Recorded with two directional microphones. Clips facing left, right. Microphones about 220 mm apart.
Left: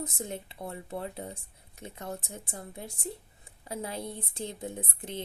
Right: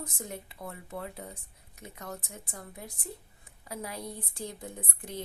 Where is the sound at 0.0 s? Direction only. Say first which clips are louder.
Left 4 dB; 25° left (ahead or behind).